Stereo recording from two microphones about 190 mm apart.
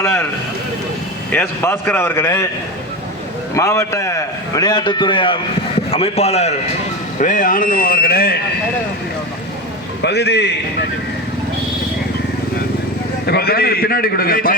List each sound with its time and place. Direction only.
0.0 s a man's voice: 10° left (ahead or behind)
1.3 s a man's voice: 10° left (ahead or behind)
3.5 s a man's voice: 15° left (ahead or behind); by 8.4 s 55° left (ahead or behind)
10.0 s a man's voice: 65° left (ahead or behind)
13.2 s a man's voice: 55° left (ahead or behind)